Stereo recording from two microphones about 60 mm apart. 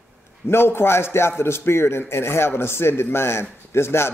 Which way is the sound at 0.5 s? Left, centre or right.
Left.